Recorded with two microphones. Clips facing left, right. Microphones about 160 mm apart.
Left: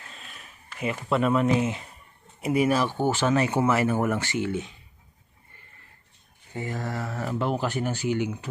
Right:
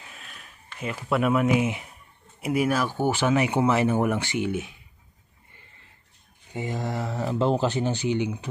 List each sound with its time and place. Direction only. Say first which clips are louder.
0.2 s a sound: even; centre (ahead or behind)
0.9 s speech: right 1 dB; 5° right (ahead or behind)
2.4 s speech: left 1 dB; centre (ahead or behind)
6.5 s speech: right 2 dB; 15° right (ahead or behind)